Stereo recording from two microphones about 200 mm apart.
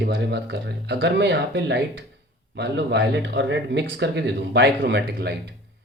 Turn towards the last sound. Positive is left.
turn(degrees=-55)  # may be behind; listen again after turning